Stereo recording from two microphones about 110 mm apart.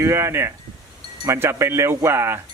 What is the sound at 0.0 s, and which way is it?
Speech, 25° right (ahead or behind).